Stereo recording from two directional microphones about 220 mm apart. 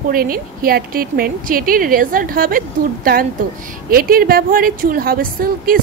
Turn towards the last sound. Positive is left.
turn(degrees=-40)  # may be behind; listen again after turning